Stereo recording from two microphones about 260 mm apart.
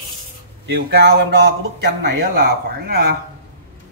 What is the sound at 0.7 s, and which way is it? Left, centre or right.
Speech, right.